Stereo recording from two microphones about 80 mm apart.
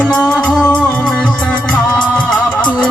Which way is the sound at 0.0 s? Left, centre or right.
Centre.